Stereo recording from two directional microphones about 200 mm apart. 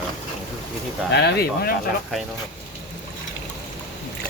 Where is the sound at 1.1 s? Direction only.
55° left (ahead or behind).